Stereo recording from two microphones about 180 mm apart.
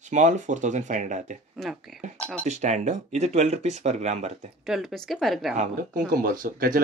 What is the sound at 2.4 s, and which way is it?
Speech, 40° right (ahead or behind).